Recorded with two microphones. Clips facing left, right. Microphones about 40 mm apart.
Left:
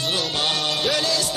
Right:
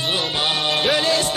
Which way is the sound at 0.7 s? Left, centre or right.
Right.